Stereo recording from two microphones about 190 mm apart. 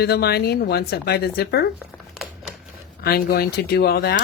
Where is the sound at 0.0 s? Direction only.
60° left (ahead or behind).